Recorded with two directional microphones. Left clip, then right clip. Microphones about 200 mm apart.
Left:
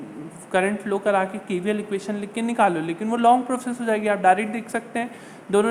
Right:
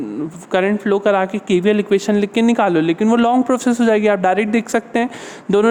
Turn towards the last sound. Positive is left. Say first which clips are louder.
# right 6 dB
turn(degrees=-50)  # may be behind; listen again after turning